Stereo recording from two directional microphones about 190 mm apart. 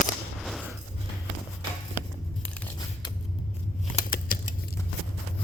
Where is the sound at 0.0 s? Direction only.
Centre (ahead or behind).